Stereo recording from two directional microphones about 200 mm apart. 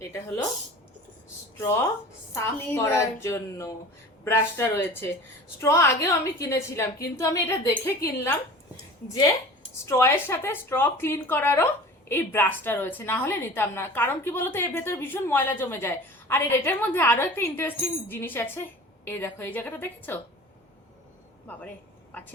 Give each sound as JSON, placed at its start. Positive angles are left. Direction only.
{"t": 2.3, "sound": "a woman's voice", "side_deg": 10}
{"t": 22.1, "sound": "a woman's voice", "side_deg": 10}